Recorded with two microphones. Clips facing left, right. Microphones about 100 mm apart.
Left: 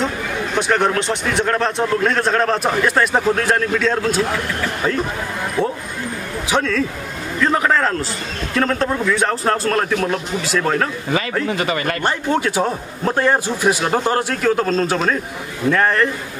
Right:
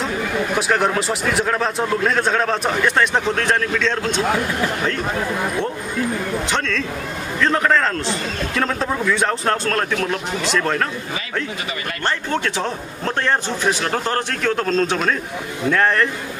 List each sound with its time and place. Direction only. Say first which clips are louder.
0.6 s a man's voice: left 3 dB; centre (ahead or behind)
6.5 s a man's voice: left 4 dB; 10° left (ahead or behind)
11.4 s speech: left 8 dB; 55° left (ahead or behind)
12.0 s a man's voice: right 1 dB; 10° left (ahead or behind)